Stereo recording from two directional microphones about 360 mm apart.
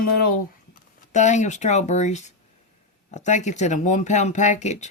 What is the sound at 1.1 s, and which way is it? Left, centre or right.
Speech, centre.